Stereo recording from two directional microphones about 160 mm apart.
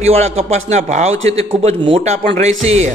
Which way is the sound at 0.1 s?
40° right (ahead or behind).